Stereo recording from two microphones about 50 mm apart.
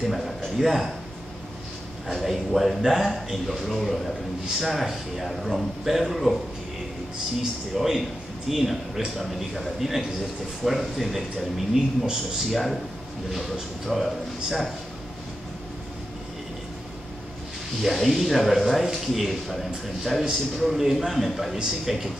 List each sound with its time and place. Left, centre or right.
0.6 s a man's voice: centre
2.0 s a man's voice: centre
7.7 s a man's voice: centre
17.8 s a man's voice: centre